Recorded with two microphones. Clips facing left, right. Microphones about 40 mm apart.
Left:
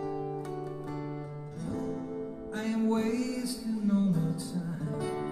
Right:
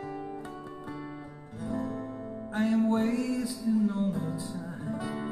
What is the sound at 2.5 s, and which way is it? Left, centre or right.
Music, centre.